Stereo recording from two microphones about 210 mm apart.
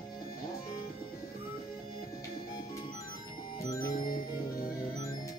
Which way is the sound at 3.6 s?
15° left (ahead or behind).